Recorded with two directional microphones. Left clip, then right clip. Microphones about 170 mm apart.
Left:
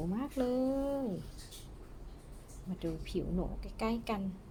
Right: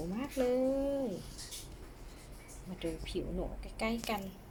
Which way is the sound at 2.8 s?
25° left (ahead or behind).